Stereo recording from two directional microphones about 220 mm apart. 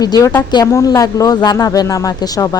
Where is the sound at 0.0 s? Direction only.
20° left (ahead or behind).